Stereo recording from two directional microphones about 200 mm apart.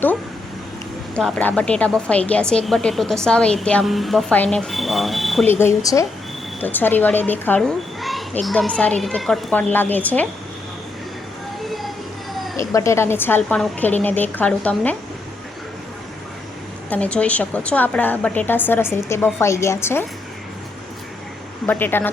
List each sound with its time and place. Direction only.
1.1 s a woman's voice: 5° left (ahead or behind)
5.5 s a child's voice: 15° left (ahead or behind)
12.5 s a child's voice: 15° left (ahead or behind)
16.9 s a child's voice: 5° left (ahead or behind)
21.7 s a child's voice: 10° left (ahead or behind)